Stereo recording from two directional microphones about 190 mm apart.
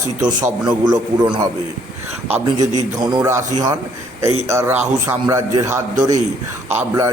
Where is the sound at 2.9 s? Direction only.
20° right (ahead or behind).